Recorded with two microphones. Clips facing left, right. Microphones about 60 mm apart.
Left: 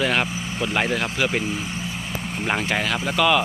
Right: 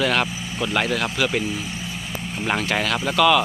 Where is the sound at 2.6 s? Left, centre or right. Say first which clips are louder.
Right 1 dB; centre.